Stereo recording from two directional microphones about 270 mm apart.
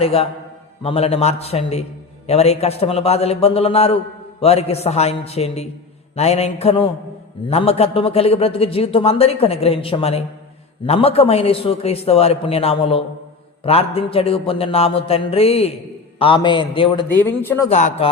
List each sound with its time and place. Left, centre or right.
0.0 s a man's voice: left
17.2 s a man's voice: centre
17.7 s a man's voice: left